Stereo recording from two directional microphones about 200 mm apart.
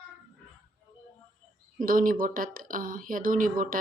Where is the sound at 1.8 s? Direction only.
40° right (ahead or behind).